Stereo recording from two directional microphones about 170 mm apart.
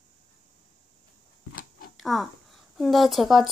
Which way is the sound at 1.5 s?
60° left (ahead or behind).